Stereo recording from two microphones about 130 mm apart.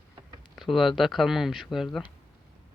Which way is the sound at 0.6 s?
Centre (ahead or behind).